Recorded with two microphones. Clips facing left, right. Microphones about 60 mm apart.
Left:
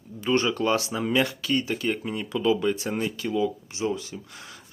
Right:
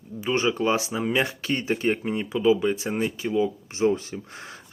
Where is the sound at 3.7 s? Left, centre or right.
Right.